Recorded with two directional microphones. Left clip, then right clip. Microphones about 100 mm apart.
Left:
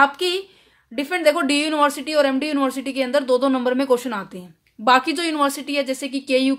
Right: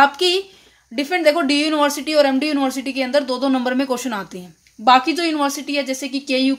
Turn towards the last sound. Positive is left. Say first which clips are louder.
# even
turn(degrees=10)  # may be behind; listen again after turning